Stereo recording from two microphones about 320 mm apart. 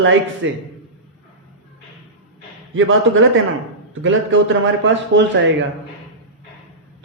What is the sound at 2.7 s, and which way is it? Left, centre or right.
Speech, right.